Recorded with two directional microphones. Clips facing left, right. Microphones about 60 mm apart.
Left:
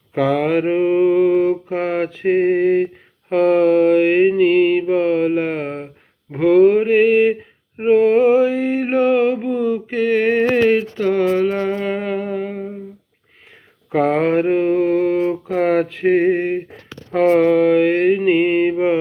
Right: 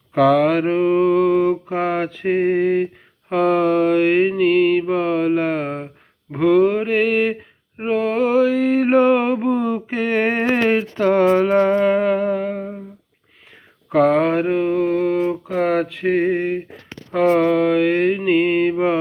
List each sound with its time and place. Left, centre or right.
0.2 s mantra: centre
5.6 s a sound: centre
6.4 s mantra: centre
7.9 s mantra: left; by 9.4 s centre
9.5 s a sound: centre
11.4 s music: centre
11.8 s music: centre
13.9 s mantra: left